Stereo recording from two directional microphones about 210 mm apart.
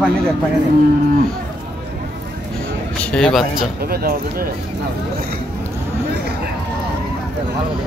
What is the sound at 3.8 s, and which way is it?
Speech, 45° right (ahead or behind).